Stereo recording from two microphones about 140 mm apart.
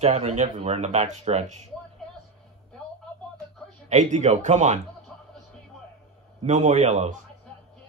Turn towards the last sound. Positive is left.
turn(degrees=-55)  # may be behind; listen again after turning